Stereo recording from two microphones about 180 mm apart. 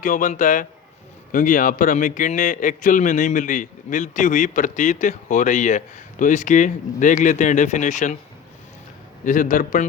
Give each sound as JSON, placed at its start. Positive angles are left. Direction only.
{"t": 0.0, "sound": "a man's voice", "side_deg": 50}
{"t": 9.2, "sound": "a man's voice", "side_deg": 45}